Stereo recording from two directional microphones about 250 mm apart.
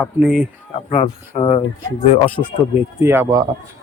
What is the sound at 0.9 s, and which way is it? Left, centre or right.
Speech, left.